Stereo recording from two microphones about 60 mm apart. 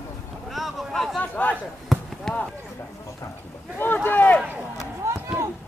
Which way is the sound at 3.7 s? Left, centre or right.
Left.